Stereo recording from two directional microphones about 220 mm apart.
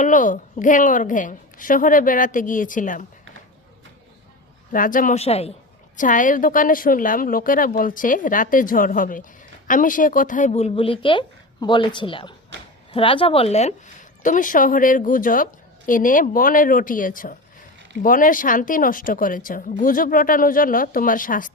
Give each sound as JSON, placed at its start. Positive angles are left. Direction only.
{"t": 0.0, "sound": "speech", "side_deg": 35}
{"t": 4.7, "sound": "a woman's voice", "side_deg": 40}
{"t": 12.5, "sound": "a sound", "side_deg": -55}
{"t": 12.9, "sound": "speech", "side_deg": 25}